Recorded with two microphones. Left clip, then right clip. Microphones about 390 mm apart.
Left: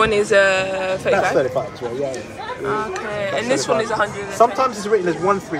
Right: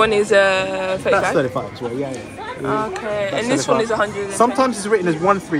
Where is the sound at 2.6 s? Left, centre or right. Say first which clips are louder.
Right 2 dB; centre.